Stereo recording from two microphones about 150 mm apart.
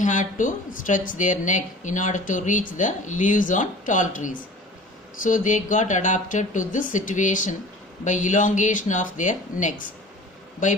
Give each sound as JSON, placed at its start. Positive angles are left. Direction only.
{"t": 0.0, "sound": "speech", "side_deg": 60}